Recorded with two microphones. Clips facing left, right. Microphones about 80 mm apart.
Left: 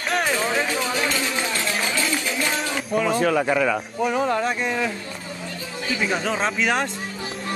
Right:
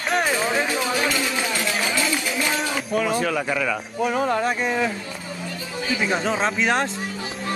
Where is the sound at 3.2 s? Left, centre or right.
Left.